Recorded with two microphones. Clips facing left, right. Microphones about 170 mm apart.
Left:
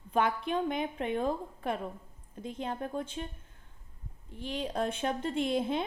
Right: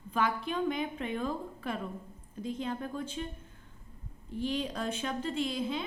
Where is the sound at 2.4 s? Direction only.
60° left (ahead or behind).